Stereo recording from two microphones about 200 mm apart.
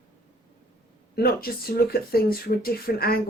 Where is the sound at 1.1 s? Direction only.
50° left (ahead or behind).